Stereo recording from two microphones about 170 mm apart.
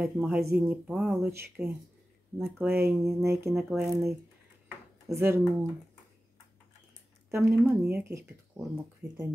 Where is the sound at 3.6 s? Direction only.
Centre (ahead or behind).